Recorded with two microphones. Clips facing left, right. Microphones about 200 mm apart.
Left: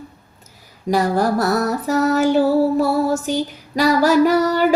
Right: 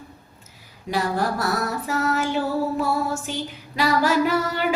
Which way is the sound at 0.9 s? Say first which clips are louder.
Left 6 dB; 40° left (ahead or behind).